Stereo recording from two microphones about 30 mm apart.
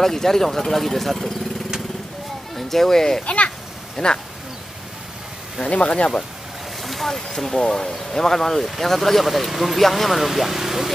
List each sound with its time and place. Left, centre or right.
0.0 s speech: centre
2.5 s speech: centre
3.9 s speech: left
5.7 s speech: left
6.8 s vehicle: centre
7.1 s speech: centre
9.5 s speech: centre